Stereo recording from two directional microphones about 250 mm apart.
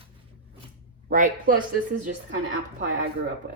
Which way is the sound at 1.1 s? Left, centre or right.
Right.